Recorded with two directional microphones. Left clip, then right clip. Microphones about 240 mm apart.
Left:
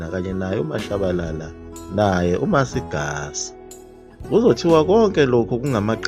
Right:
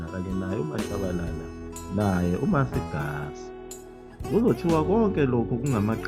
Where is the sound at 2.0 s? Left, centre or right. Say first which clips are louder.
Left 9 dB; left.